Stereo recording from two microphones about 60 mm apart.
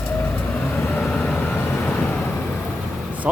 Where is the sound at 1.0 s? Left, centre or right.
Left.